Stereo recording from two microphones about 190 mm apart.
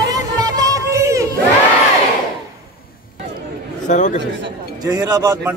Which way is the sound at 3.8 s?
40° left (ahead or behind).